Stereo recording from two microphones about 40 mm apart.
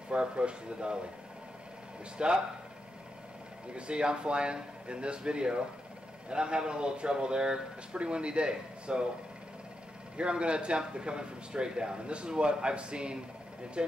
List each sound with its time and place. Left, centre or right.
0.1 s speech: right
2.2 s speech: right
3.7 s speech: right
10.1 s speech: right